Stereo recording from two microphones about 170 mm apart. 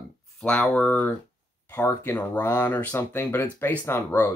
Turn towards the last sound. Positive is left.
turn(degrees=15)  # may be behind; listen again after turning